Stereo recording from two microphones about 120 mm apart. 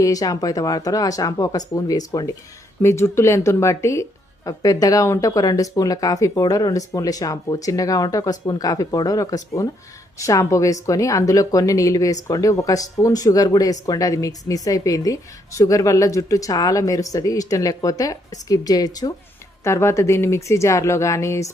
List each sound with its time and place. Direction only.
0.0 s a woman's voice: 30° left (ahead or behind)